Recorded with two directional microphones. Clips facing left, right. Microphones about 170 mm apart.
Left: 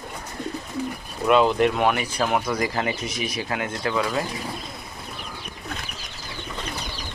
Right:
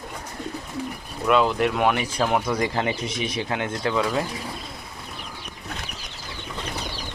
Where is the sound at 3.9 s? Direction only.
Centre (ahead or behind).